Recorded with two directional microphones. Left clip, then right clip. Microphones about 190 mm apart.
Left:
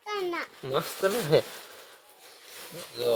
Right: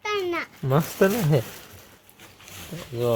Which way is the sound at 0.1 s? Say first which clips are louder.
Right 4 dB; centre (ahead or behind).